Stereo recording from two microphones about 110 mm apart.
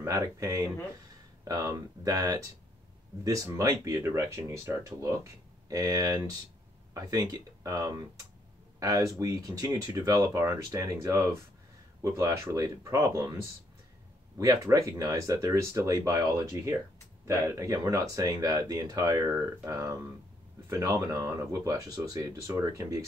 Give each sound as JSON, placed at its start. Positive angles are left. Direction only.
{"t": 0.0, "sound": "speech", "side_deg": -30}